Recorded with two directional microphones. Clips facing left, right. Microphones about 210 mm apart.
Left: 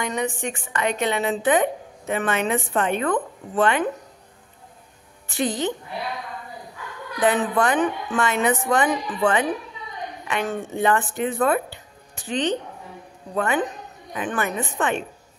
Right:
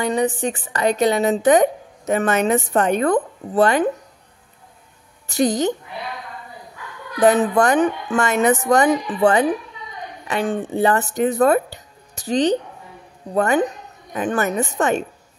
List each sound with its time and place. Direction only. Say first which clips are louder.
0.0 s a woman's voice: right 6 dB; 35° right (ahead or behind)
5.3 s a woman's voice: right 6 dB; 45° right (ahead or behind)
7.2 s a woman's voice: right 5 dB; 40° right (ahead or behind)